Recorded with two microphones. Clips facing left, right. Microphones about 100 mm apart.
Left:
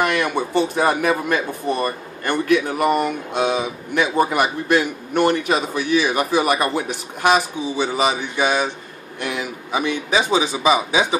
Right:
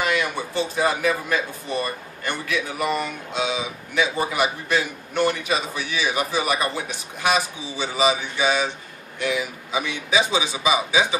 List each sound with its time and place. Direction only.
0.0 s a man's voice: 60° left (ahead or behind)